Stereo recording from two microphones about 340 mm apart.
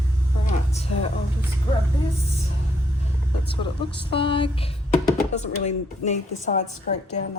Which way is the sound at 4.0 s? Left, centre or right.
Centre.